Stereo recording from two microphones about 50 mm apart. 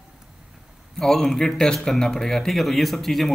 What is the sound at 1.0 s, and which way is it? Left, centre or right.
Speech, centre.